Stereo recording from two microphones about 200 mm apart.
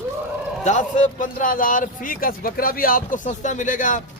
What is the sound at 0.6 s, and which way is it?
A man's voice, 40° left (ahead or behind).